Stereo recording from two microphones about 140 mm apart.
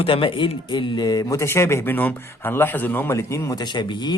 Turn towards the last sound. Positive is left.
turn(degrees=30)  # may be behind; listen again after turning